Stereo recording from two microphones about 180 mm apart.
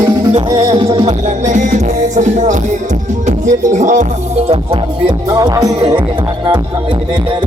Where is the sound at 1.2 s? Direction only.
40° right (ahead or behind).